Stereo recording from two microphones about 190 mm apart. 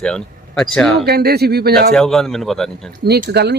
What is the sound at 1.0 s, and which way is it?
Speech, 55° right (ahead or behind).